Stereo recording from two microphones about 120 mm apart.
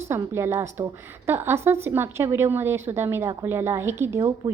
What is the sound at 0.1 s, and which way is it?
A woman's voice, 20° right (ahead or behind).